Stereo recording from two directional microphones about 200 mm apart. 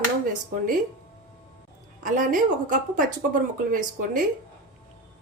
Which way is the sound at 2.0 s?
40° right (ahead or behind).